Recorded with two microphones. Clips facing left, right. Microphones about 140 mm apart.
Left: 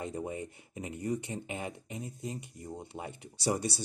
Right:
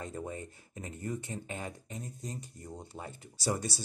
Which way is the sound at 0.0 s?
20° left (ahead or behind).